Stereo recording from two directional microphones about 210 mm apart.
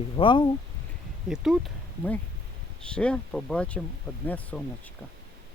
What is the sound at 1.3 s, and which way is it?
Speech, centre (ahead or behind).